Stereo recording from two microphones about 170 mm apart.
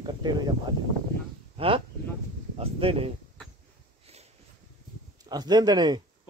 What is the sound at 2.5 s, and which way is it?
Speech, 35° right (ahead or behind).